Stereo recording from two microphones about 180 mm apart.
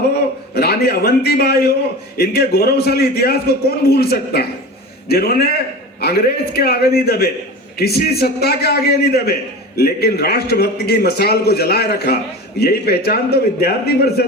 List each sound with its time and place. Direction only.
0.5 s a man's voice: 60° left (ahead or behind)